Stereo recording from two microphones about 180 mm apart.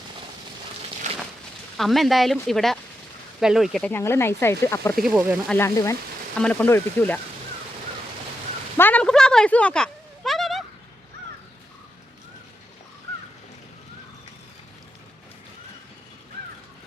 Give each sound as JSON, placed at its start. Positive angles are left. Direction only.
{"t": 1.7, "sound": "speech", "side_deg": 0}
{"t": 4.9, "sound": "speech", "side_deg": -5}
{"t": 5.5, "sound": "speech", "side_deg": 15}
{"t": 8.8, "sound": "a sound", "side_deg": 10}